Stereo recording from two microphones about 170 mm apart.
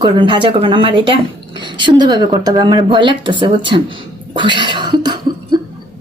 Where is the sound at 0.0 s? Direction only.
30° right (ahead or behind).